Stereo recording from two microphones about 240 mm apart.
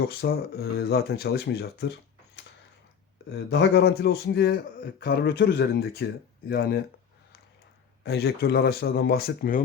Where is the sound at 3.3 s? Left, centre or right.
Left.